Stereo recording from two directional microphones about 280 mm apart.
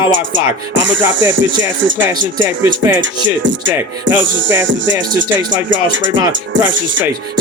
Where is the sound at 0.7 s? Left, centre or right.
Right.